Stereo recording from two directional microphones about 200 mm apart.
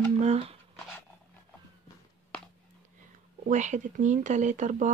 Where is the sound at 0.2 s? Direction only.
30° right (ahead or behind).